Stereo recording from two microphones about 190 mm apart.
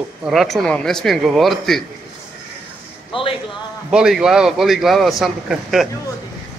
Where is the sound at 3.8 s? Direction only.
5° right (ahead or behind).